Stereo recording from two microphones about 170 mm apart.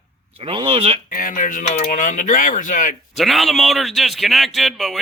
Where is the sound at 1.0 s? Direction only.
55° left (ahead or behind).